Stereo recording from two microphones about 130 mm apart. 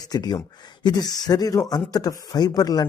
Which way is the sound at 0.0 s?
30° left (ahead or behind).